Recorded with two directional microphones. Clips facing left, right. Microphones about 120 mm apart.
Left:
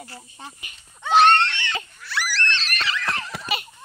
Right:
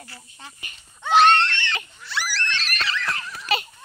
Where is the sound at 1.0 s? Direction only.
5° left (ahead or behind).